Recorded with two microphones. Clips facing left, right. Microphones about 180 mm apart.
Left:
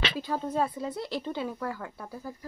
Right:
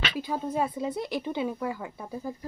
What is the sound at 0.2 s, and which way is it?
Speech, 10° right (ahead or behind).